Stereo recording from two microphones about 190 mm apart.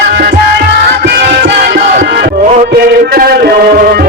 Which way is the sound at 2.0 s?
60° right (ahead or behind).